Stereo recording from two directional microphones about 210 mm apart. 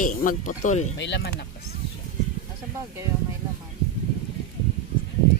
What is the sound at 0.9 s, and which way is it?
Speech, 55° left (ahead or behind).